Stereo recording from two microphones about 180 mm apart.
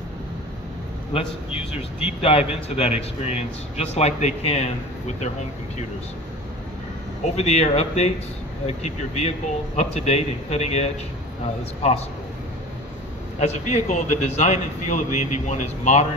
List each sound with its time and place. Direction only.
1.1 s a man's voice: 30° left (ahead or behind)
7.2 s a man's voice: 35° left (ahead or behind)
13.4 s a man's voice: 40° left (ahead or behind)